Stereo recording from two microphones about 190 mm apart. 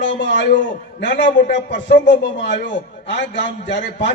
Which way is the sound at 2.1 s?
70° left (ahead or behind).